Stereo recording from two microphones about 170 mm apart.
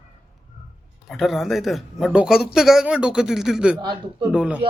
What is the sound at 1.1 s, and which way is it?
Speech, centre (ahead or behind).